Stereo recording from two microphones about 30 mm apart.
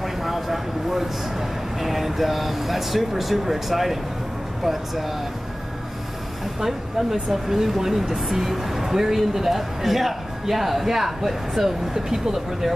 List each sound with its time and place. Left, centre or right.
0.0 s a sound: centre
1.8 s speech: centre
6.6 s speech: centre
11.9 s speech: centre